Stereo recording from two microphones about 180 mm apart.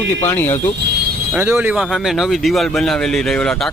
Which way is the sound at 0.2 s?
15° left (ahead or behind).